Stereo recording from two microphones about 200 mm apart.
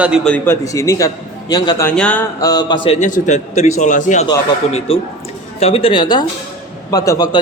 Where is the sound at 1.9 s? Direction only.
5° left (ahead or behind).